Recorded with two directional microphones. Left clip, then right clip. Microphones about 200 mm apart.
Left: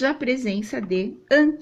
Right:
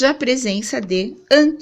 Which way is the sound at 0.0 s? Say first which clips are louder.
Right 6 dB; 50° right (ahead or behind).